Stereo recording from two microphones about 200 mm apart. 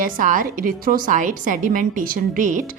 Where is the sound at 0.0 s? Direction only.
40° right (ahead or behind).